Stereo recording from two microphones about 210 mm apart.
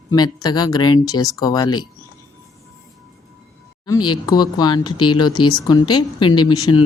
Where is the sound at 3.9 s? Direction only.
20° left (ahead or behind).